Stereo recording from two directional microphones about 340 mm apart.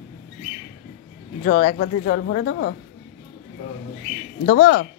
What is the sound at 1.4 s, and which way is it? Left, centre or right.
A woman's voice, left.